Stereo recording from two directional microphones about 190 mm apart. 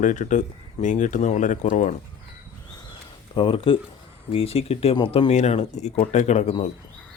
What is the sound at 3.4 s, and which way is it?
Speech, 30° left (ahead or behind).